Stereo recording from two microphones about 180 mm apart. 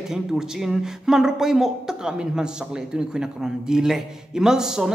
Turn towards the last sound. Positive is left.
turn(degrees=-5)  # may be behind; listen again after turning